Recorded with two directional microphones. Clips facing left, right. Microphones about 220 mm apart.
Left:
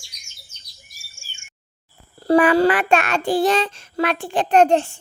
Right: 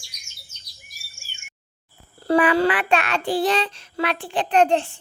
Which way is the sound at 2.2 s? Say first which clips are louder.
Left 3 dB; 40° left (ahead or behind).